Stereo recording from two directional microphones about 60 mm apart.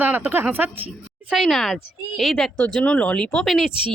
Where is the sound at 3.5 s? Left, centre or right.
Centre.